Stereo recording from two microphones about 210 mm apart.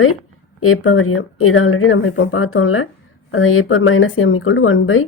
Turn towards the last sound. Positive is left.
turn(degrees=70)  # may be behind; listen again after turning